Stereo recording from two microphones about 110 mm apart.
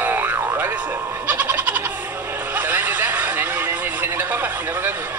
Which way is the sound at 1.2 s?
15° right (ahead or behind).